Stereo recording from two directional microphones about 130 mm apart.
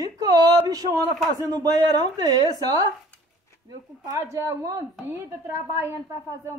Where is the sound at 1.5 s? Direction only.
30° right (ahead or behind).